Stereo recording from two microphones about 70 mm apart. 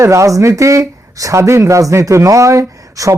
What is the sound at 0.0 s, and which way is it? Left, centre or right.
Speech, right.